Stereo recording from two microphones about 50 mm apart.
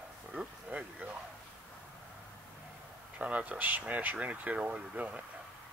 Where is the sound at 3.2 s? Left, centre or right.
Right.